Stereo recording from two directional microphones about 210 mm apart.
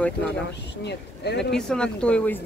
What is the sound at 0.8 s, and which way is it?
Speech, 55° left (ahead or behind).